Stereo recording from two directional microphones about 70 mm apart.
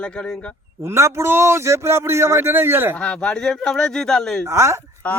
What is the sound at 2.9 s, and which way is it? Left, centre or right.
Speech, centre.